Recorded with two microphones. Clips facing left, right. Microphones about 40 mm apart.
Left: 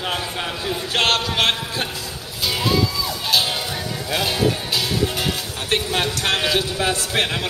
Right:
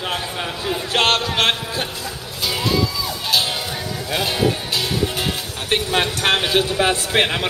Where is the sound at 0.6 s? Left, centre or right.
Centre.